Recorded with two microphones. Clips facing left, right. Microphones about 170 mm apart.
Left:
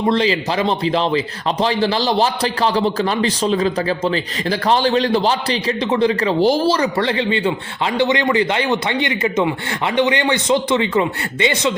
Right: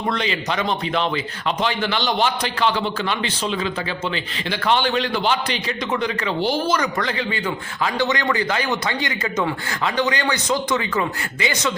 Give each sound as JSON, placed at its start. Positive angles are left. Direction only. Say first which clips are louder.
{"t": 0.1, "sound": "a man's voice", "louder": "left 6 dB", "side_deg": 30}